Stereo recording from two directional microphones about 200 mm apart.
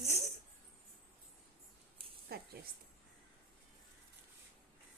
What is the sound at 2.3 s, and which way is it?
Speech, 50° right (ahead or behind).